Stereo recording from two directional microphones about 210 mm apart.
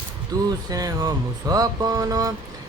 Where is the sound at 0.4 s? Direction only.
15° right (ahead or behind).